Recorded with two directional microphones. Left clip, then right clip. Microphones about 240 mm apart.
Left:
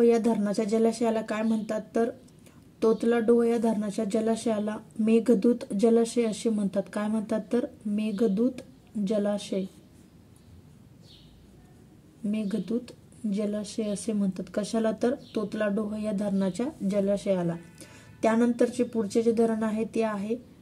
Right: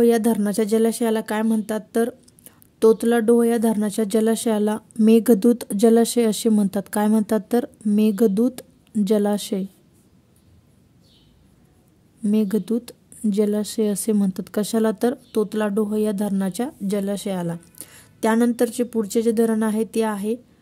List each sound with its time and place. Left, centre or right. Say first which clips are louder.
0.2 s a woman's voice: right 6 dB; right
2.8 s speech: right 7 dB; right
12.3 s a woman's voice: right 9 dB; right